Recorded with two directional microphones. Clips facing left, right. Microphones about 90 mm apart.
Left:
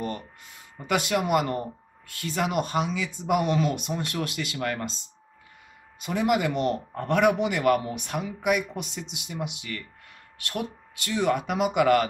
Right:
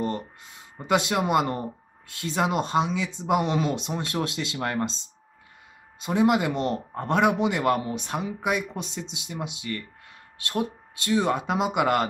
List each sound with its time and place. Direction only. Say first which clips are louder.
0.7 s a man's voice: right 2 dB; 25° right (ahead or behind)